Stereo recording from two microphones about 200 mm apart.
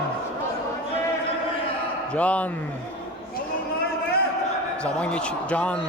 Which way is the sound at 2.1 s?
5° left (ahead or behind).